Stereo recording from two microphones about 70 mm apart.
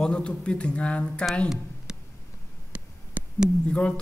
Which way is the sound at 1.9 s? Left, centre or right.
Centre.